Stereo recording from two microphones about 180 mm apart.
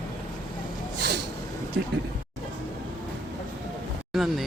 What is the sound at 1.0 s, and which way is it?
Vehicle, 70° right (ahead or behind).